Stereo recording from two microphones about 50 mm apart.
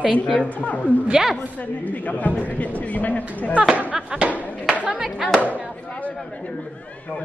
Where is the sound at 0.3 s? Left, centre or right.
Left.